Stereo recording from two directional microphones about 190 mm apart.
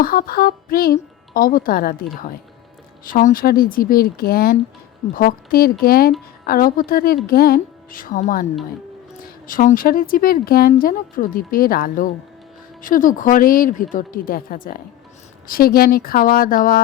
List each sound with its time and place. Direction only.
0.0 s speech: 50° left (ahead or behind)
9.5 s speech: 45° left (ahead or behind)